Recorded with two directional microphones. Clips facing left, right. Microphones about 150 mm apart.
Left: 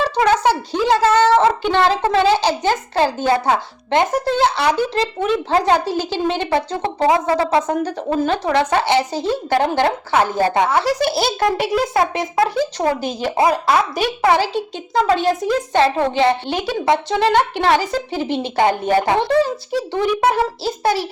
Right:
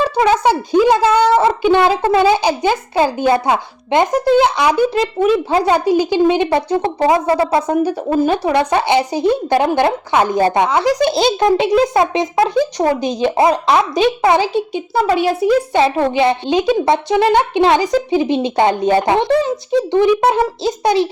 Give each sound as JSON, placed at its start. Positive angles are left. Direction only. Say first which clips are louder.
{"t": 0.2, "sound": "a child's voice", "louder": "right 2 dB", "side_deg": -10}